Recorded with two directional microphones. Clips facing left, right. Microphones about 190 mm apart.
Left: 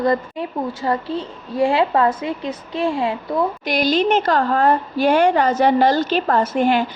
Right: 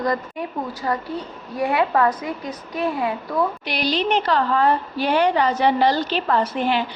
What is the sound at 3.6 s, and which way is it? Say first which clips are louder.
A woman's voice: left 5 dB; 45° left (ahead or behind).